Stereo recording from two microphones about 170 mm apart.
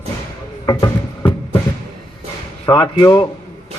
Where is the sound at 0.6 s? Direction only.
20° left (ahead or behind).